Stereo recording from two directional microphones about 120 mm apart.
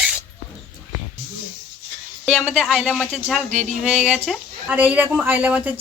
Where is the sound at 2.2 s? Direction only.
5° right (ahead or behind).